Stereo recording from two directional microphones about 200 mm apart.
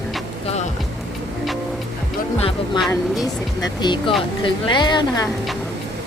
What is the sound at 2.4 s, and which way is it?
Speech, 25° left (ahead or behind).